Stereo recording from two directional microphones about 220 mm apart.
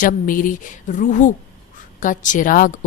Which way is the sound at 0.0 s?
40° left (ahead or behind).